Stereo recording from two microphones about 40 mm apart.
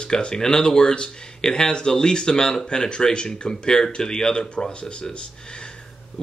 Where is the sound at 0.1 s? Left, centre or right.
Centre.